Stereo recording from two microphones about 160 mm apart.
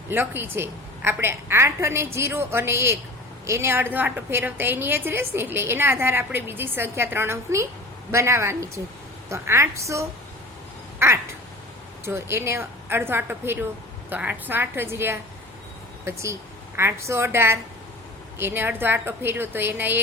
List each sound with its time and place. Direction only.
0.1 s a woman's voice: 15° right (ahead or behind)
11.0 s quack: 15° right (ahead or behind)
12.0 s a woman's voice: 15° right (ahead or behind)